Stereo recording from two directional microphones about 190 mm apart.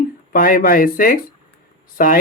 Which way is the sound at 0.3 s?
50° left (ahead or behind).